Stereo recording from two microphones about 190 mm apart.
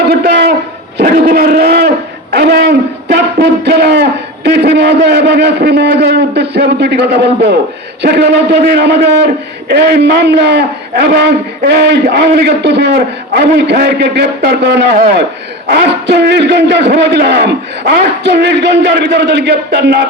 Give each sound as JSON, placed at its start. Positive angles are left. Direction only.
{"t": 0.1, "sound": "a sound", "side_deg": -55}
{"t": 0.9, "sound": "a man's voice", "side_deg": -55}
{"t": 8.6, "sound": "a man's voice", "side_deg": -60}
{"t": 14.9, "sound": "a man's voice", "side_deg": -45}
{"t": 15.6, "sound": "a man's voice", "side_deg": -60}